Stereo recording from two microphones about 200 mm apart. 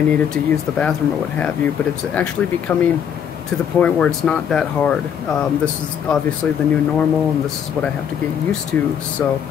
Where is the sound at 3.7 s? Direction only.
5° left (ahead or behind).